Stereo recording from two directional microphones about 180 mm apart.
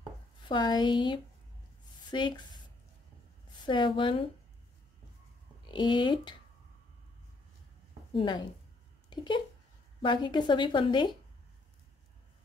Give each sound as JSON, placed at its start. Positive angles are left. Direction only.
{"t": 0.5, "sound": "speech", "side_deg": 25}
{"t": 3.6, "sound": "speech", "side_deg": 25}
{"t": 5.7, "sound": "speech", "side_deg": 25}
{"t": 8.1, "sound": "speech", "side_deg": 25}